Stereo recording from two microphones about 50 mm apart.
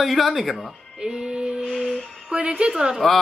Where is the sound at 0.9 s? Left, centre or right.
Centre.